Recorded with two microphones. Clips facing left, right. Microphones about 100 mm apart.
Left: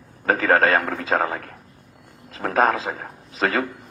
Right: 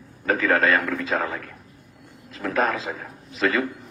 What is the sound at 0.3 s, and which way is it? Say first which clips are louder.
A man's voice: left 2 dB; 40° left (ahead or behind).